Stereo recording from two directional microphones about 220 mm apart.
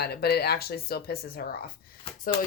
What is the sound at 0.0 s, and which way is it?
Speech, 45° left (ahead or behind).